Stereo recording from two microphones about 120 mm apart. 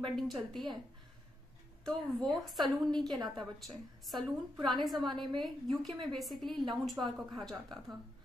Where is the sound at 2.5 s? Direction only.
Centre (ahead or behind).